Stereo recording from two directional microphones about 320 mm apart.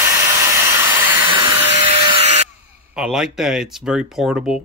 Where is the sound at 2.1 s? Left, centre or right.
Right.